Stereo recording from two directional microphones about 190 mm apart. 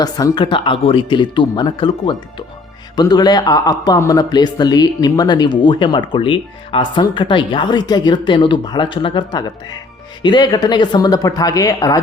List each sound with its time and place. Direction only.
0.0 s speech: 20° left (ahead or behind)